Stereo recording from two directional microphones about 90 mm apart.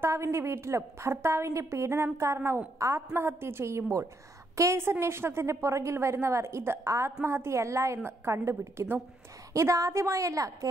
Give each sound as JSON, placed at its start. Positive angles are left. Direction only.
{"t": 0.0, "sound": "a woman's voice", "side_deg": -30}